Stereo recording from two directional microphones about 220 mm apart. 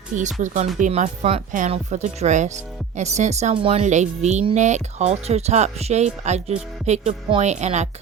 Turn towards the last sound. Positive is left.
turn(degrees=-30)  # may be behind; listen again after turning